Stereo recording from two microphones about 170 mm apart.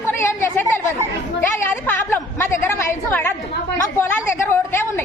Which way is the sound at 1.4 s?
15° left (ahead or behind).